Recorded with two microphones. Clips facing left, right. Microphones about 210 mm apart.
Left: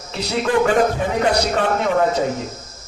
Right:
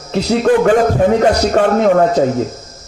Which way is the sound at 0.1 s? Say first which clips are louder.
Right 7 dB; 55° right (ahead or behind).